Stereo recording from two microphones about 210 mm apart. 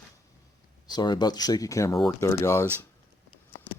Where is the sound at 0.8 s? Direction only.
20° left (ahead or behind).